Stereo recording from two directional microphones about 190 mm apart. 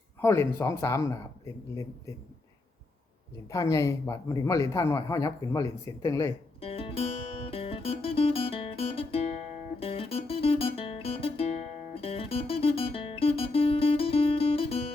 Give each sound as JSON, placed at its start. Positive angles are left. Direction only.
{"t": 0.2, "sound": "a man's voice", "side_deg": 10}
{"t": 3.5, "sound": "a man's voice", "side_deg": 15}
{"t": 6.6, "sound": "music", "side_deg": 30}
{"t": 9.8, "sound": "guitar", "side_deg": 30}